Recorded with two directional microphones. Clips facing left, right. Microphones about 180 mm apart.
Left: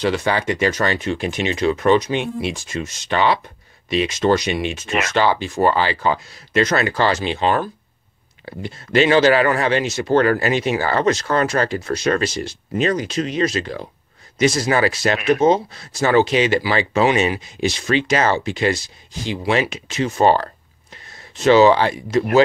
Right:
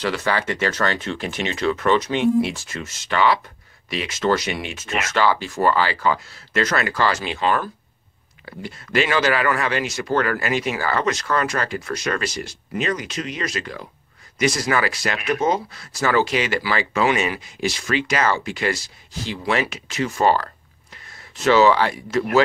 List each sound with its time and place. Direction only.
0.0 s speech: 15° left (ahead or behind)